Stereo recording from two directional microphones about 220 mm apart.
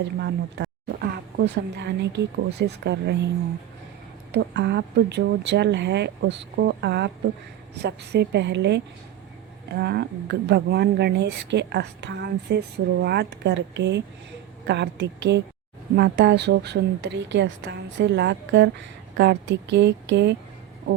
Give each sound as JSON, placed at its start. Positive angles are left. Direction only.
{"t": 0.0, "sound": "speech", "side_deg": -50}
{"t": 4.3, "sound": "speech", "side_deg": -50}